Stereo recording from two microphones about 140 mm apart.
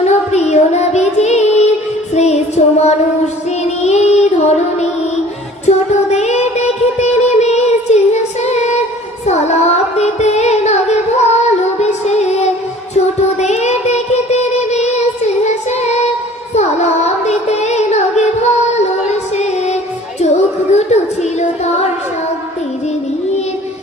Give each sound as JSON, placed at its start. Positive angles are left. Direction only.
{"t": 0.0, "sound": "child singing", "side_deg": 50}
{"t": 5.6, "sound": "child singing", "side_deg": 50}
{"t": 9.2, "sound": "music", "side_deg": 50}
{"t": 13.4, "sound": "child singing", "side_deg": 50}
{"t": 19.4, "sound": "music", "side_deg": 55}